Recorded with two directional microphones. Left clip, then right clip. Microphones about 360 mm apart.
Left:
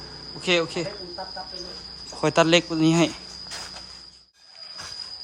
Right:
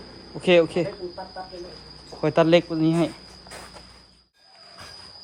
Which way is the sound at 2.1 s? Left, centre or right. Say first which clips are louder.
Right 1 dB; centre.